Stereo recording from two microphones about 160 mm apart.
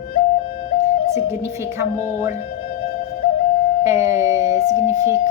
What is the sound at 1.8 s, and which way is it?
Speech, 15° right (ahead or behind).